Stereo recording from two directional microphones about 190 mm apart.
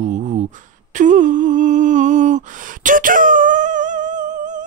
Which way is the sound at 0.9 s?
40° right (ahead or behind).